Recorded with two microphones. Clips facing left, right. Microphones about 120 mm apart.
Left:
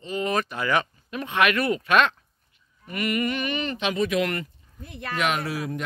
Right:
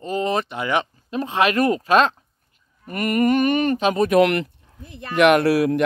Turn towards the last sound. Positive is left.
turn(degrees=-75)  # may be behind; listen again after turning